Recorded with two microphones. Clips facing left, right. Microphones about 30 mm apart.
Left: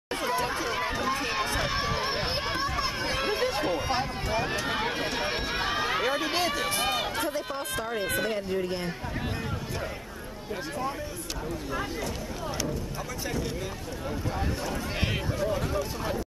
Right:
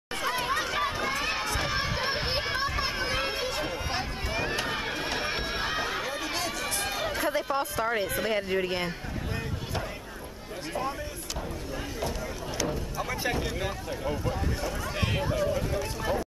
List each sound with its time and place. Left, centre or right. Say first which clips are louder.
0.3 s chatter: even; centre
0.7 s run: even; centre
1.6 s a sound: left 1 dB; centre
4.6 s run: left 2 dB; centre
5.9 s run: left 4 dB; centre
7.8 s speech: right 1 dB; right
13.2 s speech: right 2 dB; right
14.6 s speech: even; centre